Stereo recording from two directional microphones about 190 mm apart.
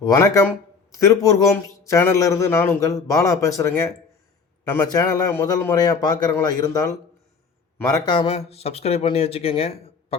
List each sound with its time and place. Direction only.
0.0 s a man's voice: 20° left (ahead or behind)